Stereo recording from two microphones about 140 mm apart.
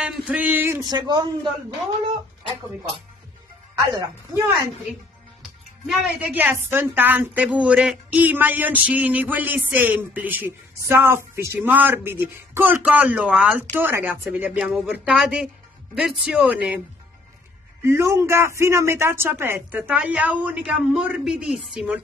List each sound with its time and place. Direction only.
0.0 s a sound: 10° right (ahead or behind)
0.8 s a man's voice: 30° right (ahead or behind)
3.7 s a man's voice: 25° right (ahead or behind)
5.9 s a woman's voice: 10° right (ahead or behind)
17.8 s a woman's voice: 20° right (ahead or behind)